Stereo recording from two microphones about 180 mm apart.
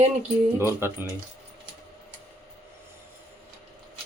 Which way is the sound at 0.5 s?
15° right (ahead or behind).